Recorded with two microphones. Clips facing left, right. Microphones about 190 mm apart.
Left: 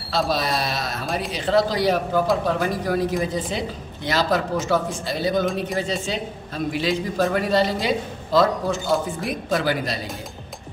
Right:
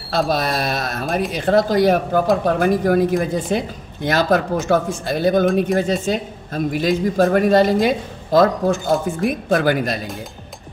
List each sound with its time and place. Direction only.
0.1 s a man's voice: 50° right (ahead or behind)